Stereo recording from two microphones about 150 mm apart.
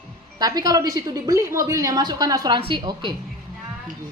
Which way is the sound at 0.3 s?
25° right (ahead or behind).